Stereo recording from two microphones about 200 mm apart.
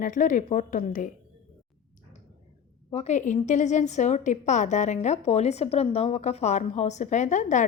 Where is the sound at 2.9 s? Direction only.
35° left (ahead or behind).